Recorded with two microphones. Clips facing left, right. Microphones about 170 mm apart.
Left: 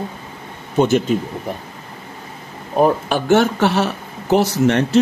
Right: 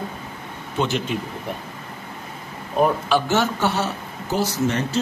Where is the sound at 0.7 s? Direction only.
45° left (ahead or behind).